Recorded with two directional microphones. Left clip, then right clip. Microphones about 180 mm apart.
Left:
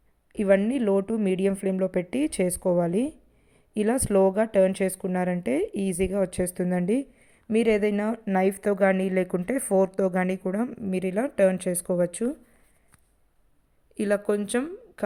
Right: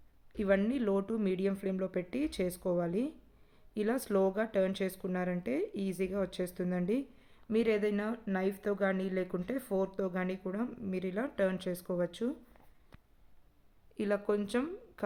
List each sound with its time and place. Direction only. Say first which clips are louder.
0.3 s speech: left 9 dB; 25° left (ahead or behind)
13.9 s speech: left 8 dB; 30° left (ahead or behind)